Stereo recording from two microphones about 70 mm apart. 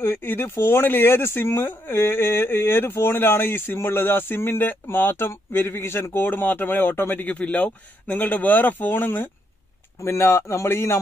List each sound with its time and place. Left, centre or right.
0.0 s speech: left
10.0 s speech: left